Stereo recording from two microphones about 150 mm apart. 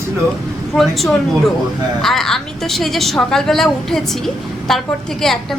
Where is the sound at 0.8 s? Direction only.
Centre (ahead or behind).